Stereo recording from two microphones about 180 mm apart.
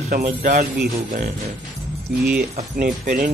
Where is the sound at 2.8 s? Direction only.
50° right (ahead or behind).